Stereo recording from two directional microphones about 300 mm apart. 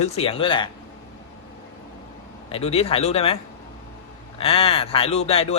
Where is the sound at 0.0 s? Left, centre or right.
Centre.